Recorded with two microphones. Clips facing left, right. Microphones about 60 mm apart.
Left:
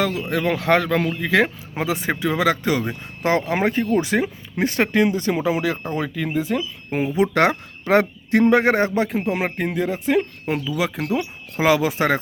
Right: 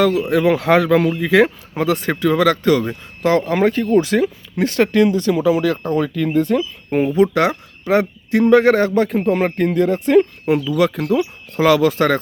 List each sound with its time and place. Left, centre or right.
0.0 s speech: centre
1.7 s speech: centre; by 5.6 s left
5.6 s speech: centre
7.3 s speech: left
8.4 s speech: left
9.0 s speech: centre